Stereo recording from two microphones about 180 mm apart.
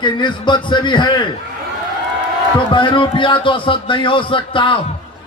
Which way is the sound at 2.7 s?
25° left (ahead or behind).